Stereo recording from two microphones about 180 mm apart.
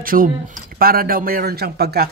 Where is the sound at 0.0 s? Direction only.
50° right (ahead or behind).